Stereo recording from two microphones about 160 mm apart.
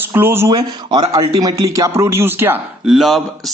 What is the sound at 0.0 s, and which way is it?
Speech, 15° right (ahead or behind).